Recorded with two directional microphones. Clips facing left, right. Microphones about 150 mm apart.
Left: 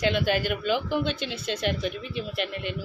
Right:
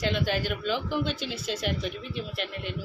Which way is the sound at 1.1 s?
60° left (ahead or behind).